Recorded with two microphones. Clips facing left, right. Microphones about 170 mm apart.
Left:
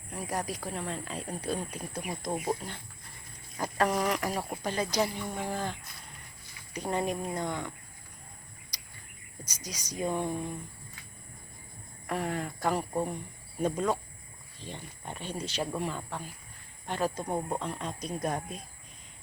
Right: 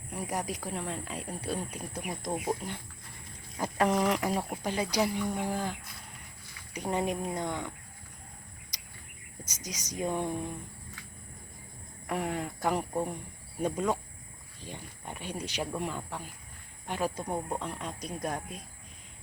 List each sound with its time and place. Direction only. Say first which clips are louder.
0.1 s speech: even; 15° right (ahead or behind)
6.7 s speech: even; 15° right (ahead or behind)
9.6 s speech: even; 20° right (ahead or behind)
12.0 s speech: even; 20° right (ahead or behind)
17.2 s speech: left 2 dB; 5° left (ahead or behind)
17.6 s speech: left 2 dB; 10° right (ahead or behind)